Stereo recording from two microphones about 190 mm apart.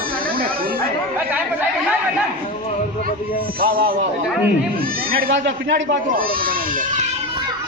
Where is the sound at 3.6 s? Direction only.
50° right (ahead or behind).